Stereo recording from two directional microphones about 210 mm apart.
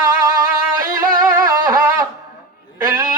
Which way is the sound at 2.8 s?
15° right (ahead or behind).